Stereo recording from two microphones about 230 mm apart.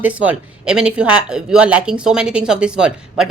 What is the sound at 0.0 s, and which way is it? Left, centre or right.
Speech, centre.